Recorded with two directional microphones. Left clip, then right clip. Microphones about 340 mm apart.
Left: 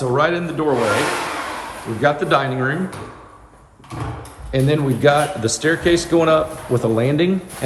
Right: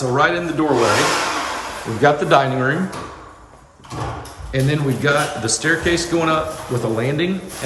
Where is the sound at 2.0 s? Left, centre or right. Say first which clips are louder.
Right 3 dB; centre.